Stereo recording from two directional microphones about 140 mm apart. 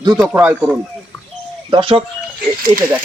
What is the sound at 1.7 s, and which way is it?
Speech, 40° right (ahead or behind).